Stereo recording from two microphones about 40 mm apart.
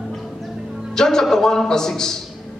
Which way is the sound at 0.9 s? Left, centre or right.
Centre.